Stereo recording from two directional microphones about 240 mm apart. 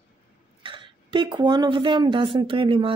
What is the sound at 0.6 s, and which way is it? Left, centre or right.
A woman's voice, right.